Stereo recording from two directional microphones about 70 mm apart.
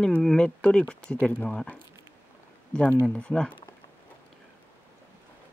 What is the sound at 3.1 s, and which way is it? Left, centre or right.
Speech, centre.